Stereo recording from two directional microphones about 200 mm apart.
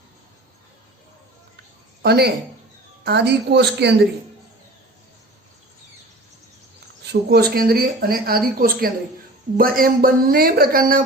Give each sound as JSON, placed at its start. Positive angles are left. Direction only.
{"t": 2.0, "sound": "a woman's voice", "side_deg": -55}
{"t": 7.0, "sound": "speech", "side_deg": -55}